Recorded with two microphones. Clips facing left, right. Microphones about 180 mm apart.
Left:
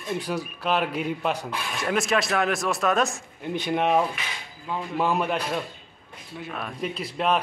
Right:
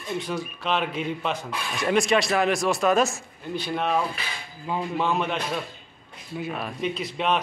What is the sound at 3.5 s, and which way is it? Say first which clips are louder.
Speech: left 3 dB; 15° left (ahead or behind).